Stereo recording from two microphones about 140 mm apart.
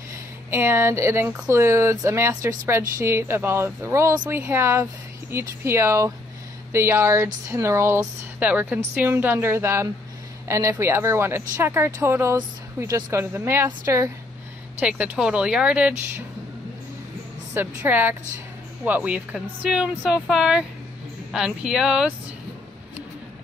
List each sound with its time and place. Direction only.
0.5 s a woman's voice: 15° right (ahead or behind)
14.8 s a woman's voice: 10° right (ahead or behind)
17.6 s a woman's voice: 15° right (ahead or behind)